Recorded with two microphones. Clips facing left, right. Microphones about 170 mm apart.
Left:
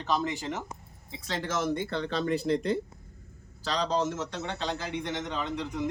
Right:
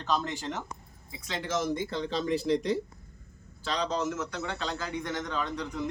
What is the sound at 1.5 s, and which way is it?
Speech, 65° left (ahead or behind).